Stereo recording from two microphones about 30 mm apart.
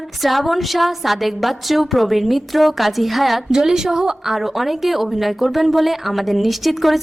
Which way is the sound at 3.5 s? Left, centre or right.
Centre.